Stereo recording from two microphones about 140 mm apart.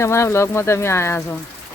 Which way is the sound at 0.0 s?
20° left (ahead or behind).